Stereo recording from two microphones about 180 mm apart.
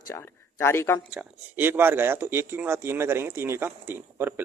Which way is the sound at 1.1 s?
10° right (ahead or behind).